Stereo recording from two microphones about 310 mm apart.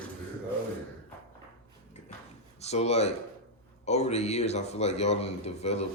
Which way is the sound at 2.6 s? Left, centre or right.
Left.